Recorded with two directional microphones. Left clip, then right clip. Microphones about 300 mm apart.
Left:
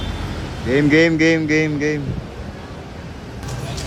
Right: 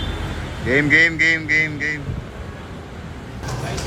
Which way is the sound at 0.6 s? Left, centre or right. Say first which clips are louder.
Even; centre.